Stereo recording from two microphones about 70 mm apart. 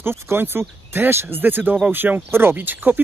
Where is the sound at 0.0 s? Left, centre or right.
Right.